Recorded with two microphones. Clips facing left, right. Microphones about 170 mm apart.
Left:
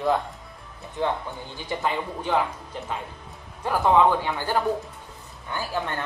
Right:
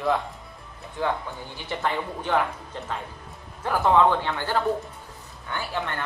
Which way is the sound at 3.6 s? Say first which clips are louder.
Left 1 dB; 10° left (ahead or behind).